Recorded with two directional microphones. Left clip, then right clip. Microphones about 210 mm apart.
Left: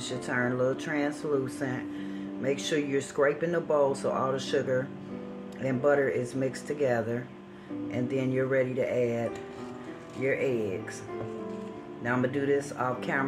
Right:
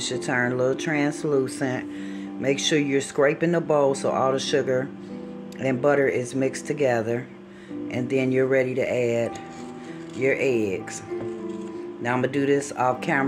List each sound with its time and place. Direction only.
0.0 s speech: 40° right (ahead or behind)
12.0 s speech: 45° right (ahead or behind)